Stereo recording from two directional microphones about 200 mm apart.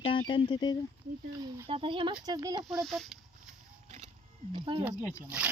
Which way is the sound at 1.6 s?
30° right (ahead or behind).